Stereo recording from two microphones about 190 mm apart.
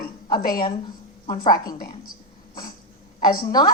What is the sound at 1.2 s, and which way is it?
Speech, 25° left (ahead or behind).